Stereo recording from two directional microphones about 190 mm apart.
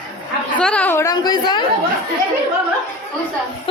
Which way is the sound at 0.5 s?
5° left (ahead or behind).